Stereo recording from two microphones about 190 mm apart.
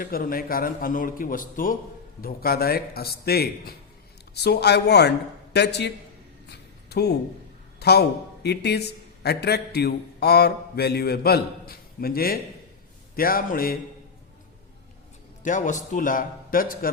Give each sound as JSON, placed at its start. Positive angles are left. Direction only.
{"t": 0.0, "sound": "a man's voice", "side_deg": 50}
{"t": 6.5, "sound": "a sound", "side_deg": 60}
{"t": 7.8, "sound": "a man's voice", "side_deg": 60}
{"t": 15.4, "sound": "a man's voice", "side_deg": 40}